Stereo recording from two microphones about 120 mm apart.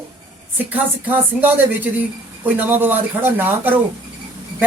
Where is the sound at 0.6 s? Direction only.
15° right (ahead or behind).